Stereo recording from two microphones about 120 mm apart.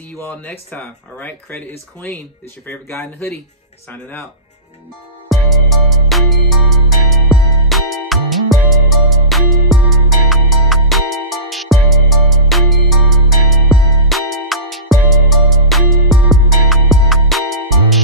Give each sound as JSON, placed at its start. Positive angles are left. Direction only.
{"t": 0.2, "sound": "speech", "side_deg": 15}
{"t": 5.3, "sound": "music", "side_deg": 0}